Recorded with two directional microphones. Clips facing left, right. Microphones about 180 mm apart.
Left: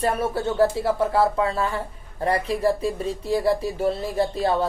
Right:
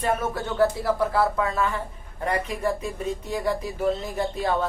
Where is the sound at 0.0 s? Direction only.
30° left (ahead or behind).